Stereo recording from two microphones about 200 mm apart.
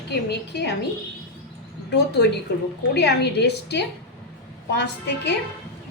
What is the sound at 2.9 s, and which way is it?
A woman's voice, 55° left (ahead or behind).